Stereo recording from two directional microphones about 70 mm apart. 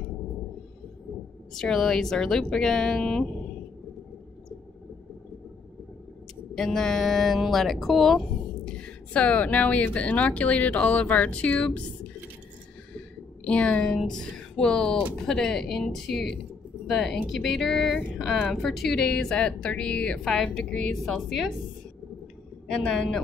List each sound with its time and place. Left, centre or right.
1.5 s a woman's voice: centre
6.5 s a woman's voice: centre
8.6 s speech: centre
13.4 s a woman's voice: centre
22.7 s a woman's voice: centre